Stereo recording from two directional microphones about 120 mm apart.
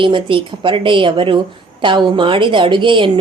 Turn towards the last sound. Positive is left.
turn(degrees=-45)  # may be behind; listen again after turning